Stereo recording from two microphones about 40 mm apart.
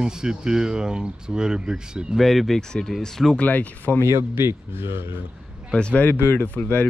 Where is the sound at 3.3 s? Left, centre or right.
Left.